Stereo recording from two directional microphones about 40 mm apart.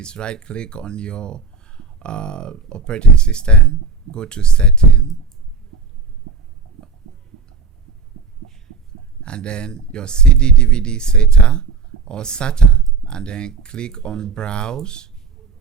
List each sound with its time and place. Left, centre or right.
0.0 s speech: left
9.2 s speech: left